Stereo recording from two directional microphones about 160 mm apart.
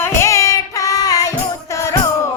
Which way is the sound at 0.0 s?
20° left (ahead or behind).